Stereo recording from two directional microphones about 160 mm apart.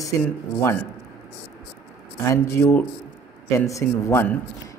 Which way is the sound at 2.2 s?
15° left (ahead or behind).